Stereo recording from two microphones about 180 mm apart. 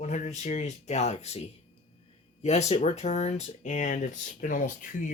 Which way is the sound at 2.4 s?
35° left (ahead or behind).